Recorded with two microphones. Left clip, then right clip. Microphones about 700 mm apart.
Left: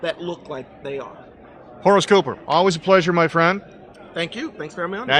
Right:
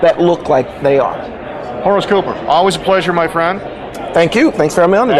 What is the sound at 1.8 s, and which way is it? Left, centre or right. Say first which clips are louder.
Speech: right 3 dB; left.